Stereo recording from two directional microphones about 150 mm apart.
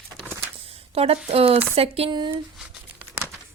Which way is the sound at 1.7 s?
40° right (ahead or behind).